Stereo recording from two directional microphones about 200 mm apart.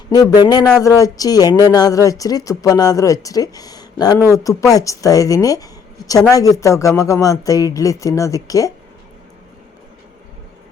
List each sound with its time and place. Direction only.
0.1 s speech: 20° left (ahead or behind)